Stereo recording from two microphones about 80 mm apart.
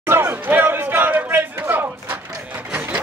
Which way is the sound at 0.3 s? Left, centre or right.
Right.